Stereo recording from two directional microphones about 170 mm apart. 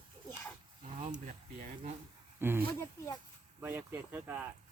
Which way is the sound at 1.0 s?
45° right (ahead or behind).